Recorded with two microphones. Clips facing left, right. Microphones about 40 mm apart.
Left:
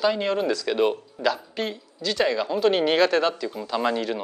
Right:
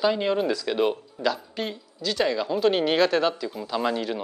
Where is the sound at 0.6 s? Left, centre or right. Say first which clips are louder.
Left 2 dB; centre.